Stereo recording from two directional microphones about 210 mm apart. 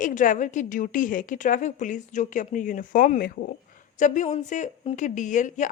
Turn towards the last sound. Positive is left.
turn(degrees=35)  # may be behind; listen again after turning